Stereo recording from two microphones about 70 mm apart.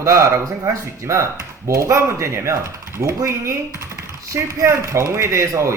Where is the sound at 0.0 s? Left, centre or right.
Right.